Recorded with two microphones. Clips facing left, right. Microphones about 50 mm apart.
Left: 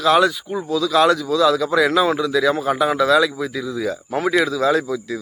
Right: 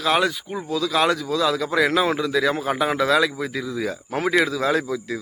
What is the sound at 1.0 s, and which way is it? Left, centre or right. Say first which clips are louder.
A man's voice: left 6 dB; right.